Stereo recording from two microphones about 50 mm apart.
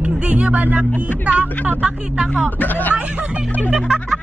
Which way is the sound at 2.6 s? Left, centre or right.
Left.